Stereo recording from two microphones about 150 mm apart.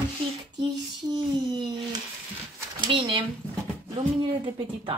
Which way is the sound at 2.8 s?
35° right (ahead or behind).